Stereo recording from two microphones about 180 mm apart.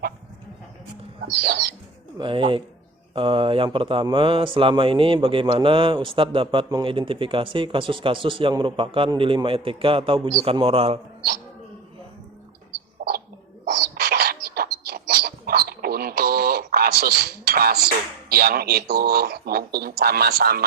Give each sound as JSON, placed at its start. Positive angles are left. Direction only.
{"t": 1.2, "sound": "speech", "side_deg": -60}
{"t": 2.1, "sound": "speech", "side_deg": -25}
{"t": 13.0, "sound": "bird", "side_deg": -60}
{"t": 13.9, "sound": "a sound", "side_deg": -60}
{"t": 20.0, "sound": "speech", "side_deg": -60}